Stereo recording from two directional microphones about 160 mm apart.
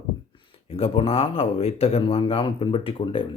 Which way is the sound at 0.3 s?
35° left (ahead or behind).